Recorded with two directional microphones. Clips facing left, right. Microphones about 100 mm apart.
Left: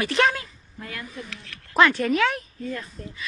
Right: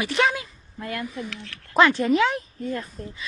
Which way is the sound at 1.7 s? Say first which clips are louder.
Right 1 dB; 25° right (ahead or behind).